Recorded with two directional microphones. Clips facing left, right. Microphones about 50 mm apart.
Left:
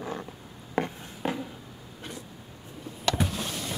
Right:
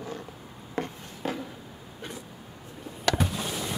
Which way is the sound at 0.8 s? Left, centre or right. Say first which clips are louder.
Left 3 dB; left.